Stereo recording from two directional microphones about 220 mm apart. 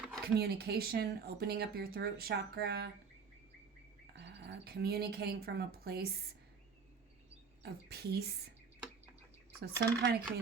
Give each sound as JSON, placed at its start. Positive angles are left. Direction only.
{"t": 0.3, "sound": "speech", "side_deg": -45}
{"t": 4.0, "sound": "speech", "side_deg": -50}
{"t": 7.6, "sound": "speech", "side_deg": -45}
{"t": 9.6, "sound": "speech", "side_deg": -45}